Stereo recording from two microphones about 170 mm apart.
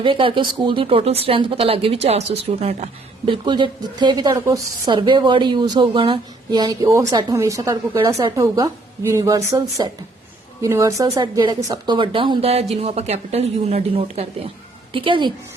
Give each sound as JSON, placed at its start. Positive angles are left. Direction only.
{"t": 0.0, "sound": "a woman's voice", "side_deg": -30}